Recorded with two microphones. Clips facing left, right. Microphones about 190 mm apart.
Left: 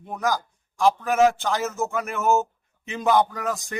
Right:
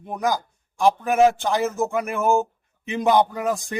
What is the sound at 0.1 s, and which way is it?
A man's voice, 15° right (ahead or behind).